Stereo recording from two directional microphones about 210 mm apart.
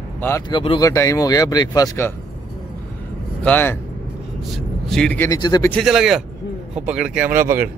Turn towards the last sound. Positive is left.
turn(degrees=-10)  # may be behind; listen again after turning